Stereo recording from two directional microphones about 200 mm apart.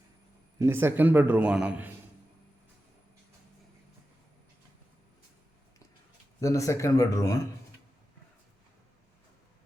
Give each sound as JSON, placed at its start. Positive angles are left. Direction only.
{"t": 0.6, "sound": "a man's voice", "side_deg": -10}
{"t": 6.4, "sound": "speech", "side_deg": 15}